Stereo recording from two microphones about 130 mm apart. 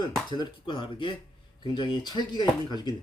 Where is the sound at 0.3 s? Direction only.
35° left (ahead or behind).